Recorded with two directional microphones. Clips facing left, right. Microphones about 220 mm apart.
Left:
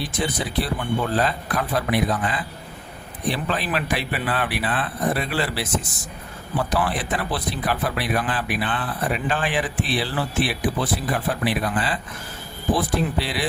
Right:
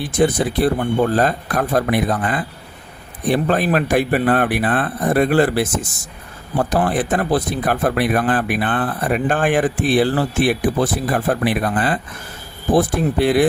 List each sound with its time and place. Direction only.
0.0 s speech: 50° right (ahead or behind)